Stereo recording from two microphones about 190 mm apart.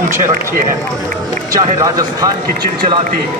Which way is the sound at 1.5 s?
20° right (ahead or behind).